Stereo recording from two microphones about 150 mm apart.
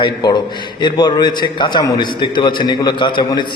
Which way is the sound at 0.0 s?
30° left (ahead or behind).